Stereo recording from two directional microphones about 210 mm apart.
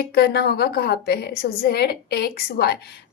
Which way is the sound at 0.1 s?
50° left (ahead or behind).